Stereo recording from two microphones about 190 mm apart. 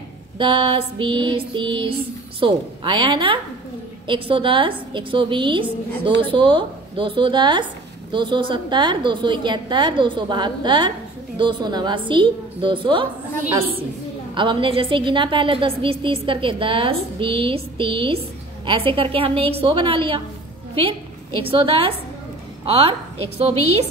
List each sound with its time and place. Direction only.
0.4 s a woman's voice: 25° right (ahead or behind)
14.3 s a woman's voice: 25° right (ahead or behind)
21.5 s a woman's voice: 30° right (ahead or behind)